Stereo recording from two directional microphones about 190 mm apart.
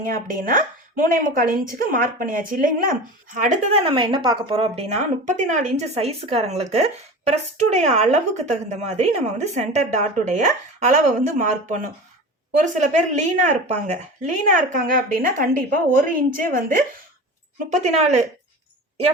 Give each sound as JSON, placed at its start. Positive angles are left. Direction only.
{"t": 0.0, "sound": "a woman's voice", "side_deg": -45}